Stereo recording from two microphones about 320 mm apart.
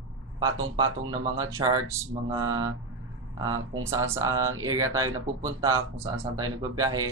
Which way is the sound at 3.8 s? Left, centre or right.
Centre.